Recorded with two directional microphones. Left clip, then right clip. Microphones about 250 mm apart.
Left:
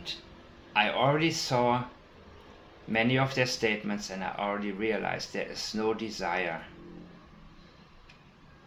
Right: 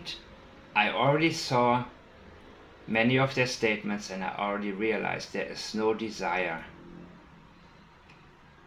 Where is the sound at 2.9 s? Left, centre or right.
Centre.